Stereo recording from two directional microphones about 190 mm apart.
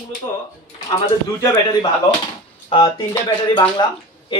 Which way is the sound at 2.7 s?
25° left (ahead or behind).